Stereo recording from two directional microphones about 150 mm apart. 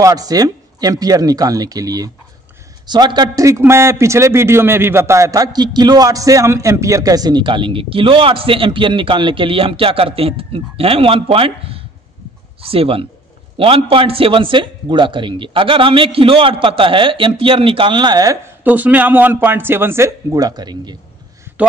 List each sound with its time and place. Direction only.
0.0 s a man's voice: 25° right (ahead or behind)
18.6 s a man's voice: 10° right (ahead or behind); by 20.9 s 30° right (ahead or behind)